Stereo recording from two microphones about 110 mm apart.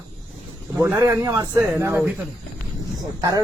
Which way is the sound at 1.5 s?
20° right (ahead or behind).